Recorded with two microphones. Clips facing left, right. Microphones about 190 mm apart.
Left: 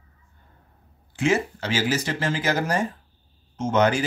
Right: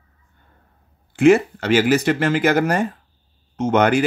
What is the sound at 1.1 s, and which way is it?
Speech, 60° right (ahead or behind).